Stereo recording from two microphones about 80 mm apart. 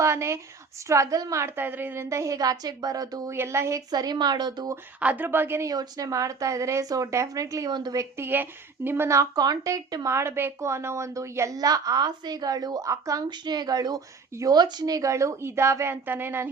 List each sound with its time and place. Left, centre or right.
0.0 s speech: right
2.0 s speech: right
3.3 s speech: right
3.8 s speech: right
4.9 s speech: centre
5.6 s speech: right
7.7 s speech: right
7.9 s speech: right
9.3 s speech: right
13.3 s speech: right
16.0 s speech: right